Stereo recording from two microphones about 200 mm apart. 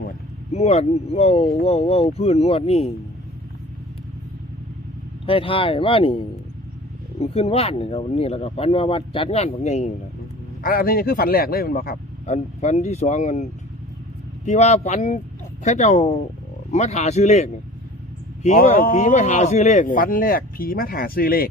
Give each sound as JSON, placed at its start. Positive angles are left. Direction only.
{"t": 0.5, "sound": "speech", "side_deg": 30}
{"t": 5.2, "sound": "speech", "side_deg": 25}
{"t": 7.2, "sound": "speech", "side_deg": 30}
{"t": 10.6, "sound": "speech", "side_deg": 45}